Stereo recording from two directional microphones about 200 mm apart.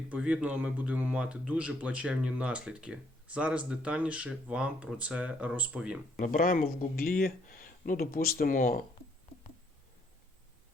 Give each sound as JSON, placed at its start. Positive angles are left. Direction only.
{"t": 0.1, "sound": "speech", "side_deg": -5}
{"t": 6.1, "sound": "speech", "side_deg": 40}